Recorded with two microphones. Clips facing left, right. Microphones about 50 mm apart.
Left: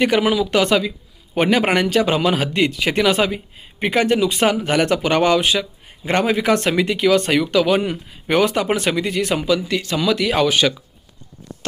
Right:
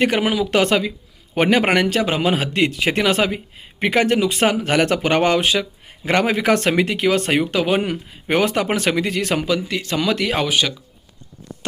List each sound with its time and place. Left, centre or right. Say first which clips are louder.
0.0 s a man's voice: left 2 dB; right
8.8 s speech: even; right
9.5 s a man's voice: left 2 dB; right